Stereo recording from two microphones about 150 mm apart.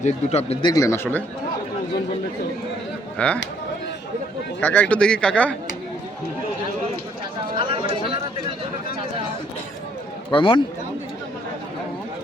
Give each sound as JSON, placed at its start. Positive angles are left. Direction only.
{"t": 0.0, "sound": "speech", "side_deg": 45}
{"t": 0.7, "sound": "speech", "side_deg": 20}
{"t": 3.2, "sound": "speech", "side_deg": 10}
{"t": 4.6, "sound": "speech", "side_deg": 10}
{"t": 7.6, "sound": "chatter", "side_deg": -35}
{"t": 10.3, "sound": "speech", "side_deg": 35}